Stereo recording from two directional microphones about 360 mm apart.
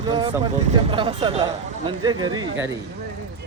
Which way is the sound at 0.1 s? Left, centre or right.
Centre.